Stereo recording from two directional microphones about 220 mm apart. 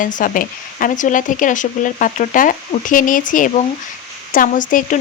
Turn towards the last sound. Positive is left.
turn(degrees=35)  # may be behind; listen again after turning